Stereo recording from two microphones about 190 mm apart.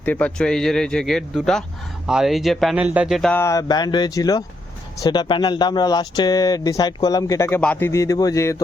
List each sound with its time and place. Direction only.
0.0 s speech: 10° left (ahead or behind)